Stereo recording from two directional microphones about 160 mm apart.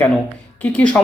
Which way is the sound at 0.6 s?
10° left (ahead or behind).